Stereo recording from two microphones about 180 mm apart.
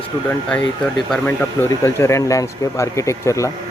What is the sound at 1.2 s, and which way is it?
Speech, 15° left (ahead or behind).